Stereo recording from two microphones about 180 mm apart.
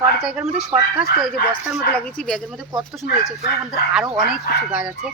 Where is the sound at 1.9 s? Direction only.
5° left (ahead or behind).